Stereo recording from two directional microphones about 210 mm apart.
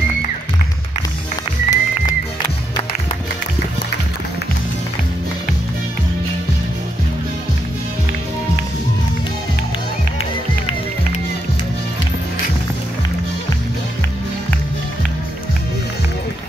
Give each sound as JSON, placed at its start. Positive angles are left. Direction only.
{"t": 1.7, "sound": "music", "side_deg": 20}